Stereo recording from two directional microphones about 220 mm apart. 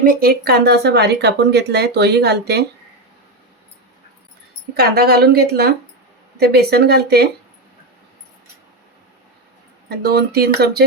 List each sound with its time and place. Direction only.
0.0 s speech: 40° right (ahead or behind)
4.8 s speech: 45° right (ahead or behind)
9.9 s speech: 45° right (ahead or behind)